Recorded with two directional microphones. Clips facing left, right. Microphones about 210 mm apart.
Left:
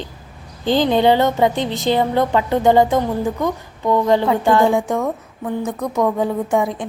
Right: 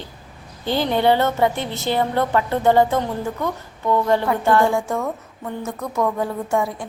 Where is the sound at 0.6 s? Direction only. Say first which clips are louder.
Left 4 dB; 15° left (ahead or behind).